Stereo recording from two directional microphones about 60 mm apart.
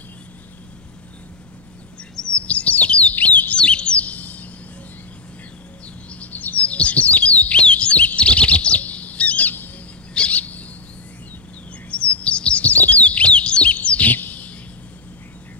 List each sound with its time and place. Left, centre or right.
2.2 s chirp: left
3.5 s chirp: centre
6.0 s bird: left
10.1 s owl: left
11.9 s chirp: left